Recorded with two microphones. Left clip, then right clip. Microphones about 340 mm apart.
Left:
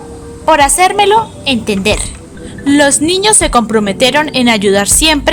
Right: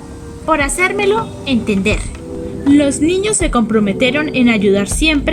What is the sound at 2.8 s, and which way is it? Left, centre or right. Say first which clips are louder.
Speech: left 8 dB; left.